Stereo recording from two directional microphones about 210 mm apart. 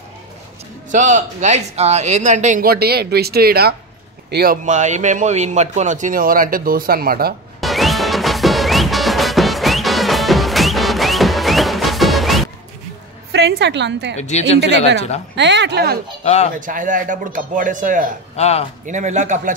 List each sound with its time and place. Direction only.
0.9 s a man's voice: 35° right (ahead or behind)
7.6 s music: centre (ahead or behind)
13.3 s a woman's voice: 55° right (ahead or behind)
14.1 s a woman's voice: 35° left (ahead or behind)
15.3 s speech: 55° right (ahead or behind)
16.5 s a man's voice: 40° right (ahead or behind)
18.3 s speech: 30° left (ahead or behind)
18.9 s a man's voice: 35° right (ahead or behind)